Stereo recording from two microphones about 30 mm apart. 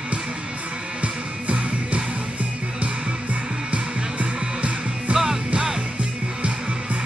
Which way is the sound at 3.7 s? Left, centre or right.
Right.